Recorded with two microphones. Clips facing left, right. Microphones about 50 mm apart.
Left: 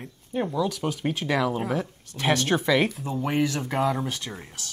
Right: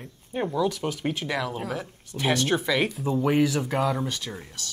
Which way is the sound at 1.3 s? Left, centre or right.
Centre.